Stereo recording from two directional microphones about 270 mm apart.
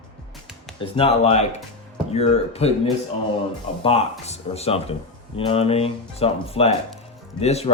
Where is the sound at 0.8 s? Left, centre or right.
Left.